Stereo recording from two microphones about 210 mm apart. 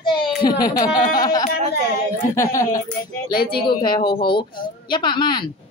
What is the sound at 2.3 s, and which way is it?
Speech, 15° left (ahead or behind).